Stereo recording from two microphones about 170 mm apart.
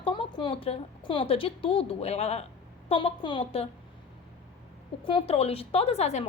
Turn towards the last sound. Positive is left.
turn(degrees=40)  # may be behind; listen again after turning